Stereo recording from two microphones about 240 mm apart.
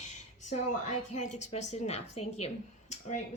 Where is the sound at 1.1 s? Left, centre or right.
Left.